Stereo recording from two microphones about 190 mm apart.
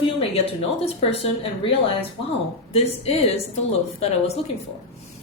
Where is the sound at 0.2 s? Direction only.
30° left (ahead or behind).